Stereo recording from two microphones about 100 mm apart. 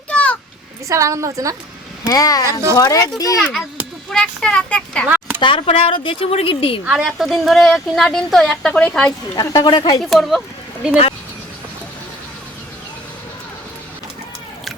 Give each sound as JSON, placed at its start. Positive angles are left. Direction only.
{"t": 0.1, "sound": "a sound", "side_deg": 15}
{"t": 0.9, "sound": "a woman's voice", "side_deg": -30}
{"t": 2.0, "sound": "a child's voice", "side_deg": 40}
{"t": 4.1, "sound": "a child's voice", "side_deg": 10}
{"t": 5.0, "sound": "a sound", "side_deg": -20}
{"t": 5.4, "sound": "speech", "side_deg": 60}
{"t": 6.8, "sound": "speech", "side_deg": -10}
{"t": 9.3, "sound": "a woman's voice", "side_deg": 40}
{"t": 10.0, "sound": "speech", "side_deg": 0}